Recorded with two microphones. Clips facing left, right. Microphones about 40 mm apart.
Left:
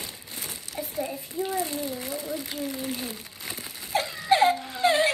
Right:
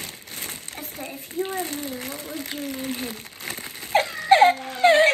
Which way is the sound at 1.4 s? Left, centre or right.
Right.